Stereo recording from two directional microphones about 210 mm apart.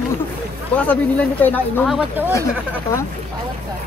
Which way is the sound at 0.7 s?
5° left (ahead or behind).